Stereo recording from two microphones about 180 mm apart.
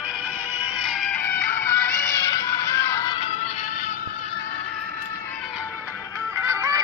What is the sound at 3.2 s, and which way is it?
Music, 35° left (ahead or behind).